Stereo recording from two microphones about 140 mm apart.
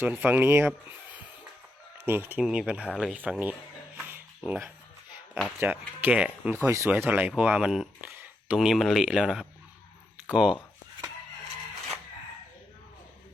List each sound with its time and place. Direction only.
0.0 s speech: 15° right (ahead or behind)
2.0 s speech: 15° right (ahead or behind); by 3.2 s 5° left (ahead or behind)
3.2 s speech: 10° right (ahead or behind)
3.9 s music: 15° right (ahead or behind)
5.5 s speech: 15° right (ahead or behind)
6.6 s speech: 20° right (ahead or behind)